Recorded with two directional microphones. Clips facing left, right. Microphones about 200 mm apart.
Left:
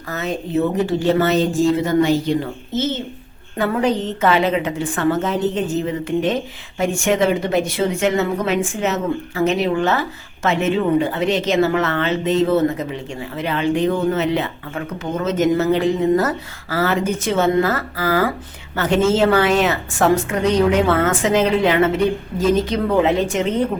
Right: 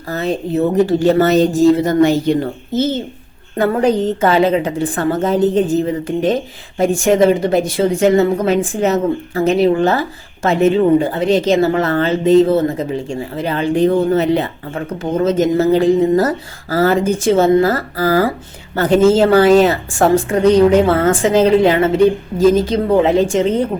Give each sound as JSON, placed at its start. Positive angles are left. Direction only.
{"t": 0.1, "sound": "a woman's voice", "side_deg": -35}